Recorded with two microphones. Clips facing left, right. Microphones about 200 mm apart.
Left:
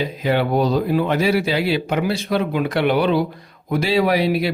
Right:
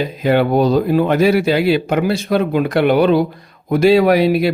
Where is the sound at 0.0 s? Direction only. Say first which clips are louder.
Right 5 dB; 50° right (ahead or behind).